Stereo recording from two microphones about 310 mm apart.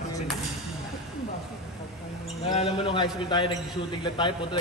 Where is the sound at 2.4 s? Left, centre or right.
Centre.